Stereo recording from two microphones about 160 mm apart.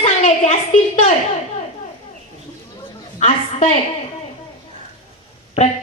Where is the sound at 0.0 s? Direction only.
45° left (ahead or behind).